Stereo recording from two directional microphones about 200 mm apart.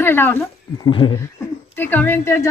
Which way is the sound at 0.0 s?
10° left (ahead or behind).